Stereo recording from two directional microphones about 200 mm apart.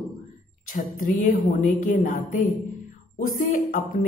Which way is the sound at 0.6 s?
40° left (ahead or behind).